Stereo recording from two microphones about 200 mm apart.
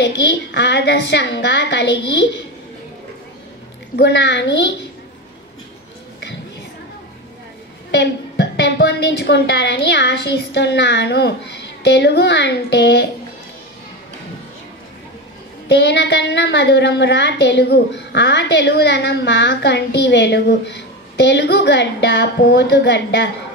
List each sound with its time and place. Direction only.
0.0 s a woman's voice: 60° left (ahead or behind)
3.9 s a woman's voice: 60° left (ahead or behind)
7.9 s a woman's voice: 60° left (ahead or behind)
15.7 s a woman's voice: 60° left (ahead or behind)